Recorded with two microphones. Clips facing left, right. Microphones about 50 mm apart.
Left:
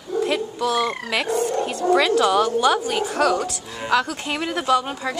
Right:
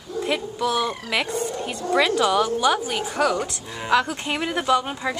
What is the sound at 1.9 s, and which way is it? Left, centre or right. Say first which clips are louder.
A woman's voice: left 2 dB; centre.